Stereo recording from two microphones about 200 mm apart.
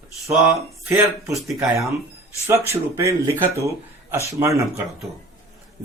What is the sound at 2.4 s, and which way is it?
Speech, 15° right (ahead or behind).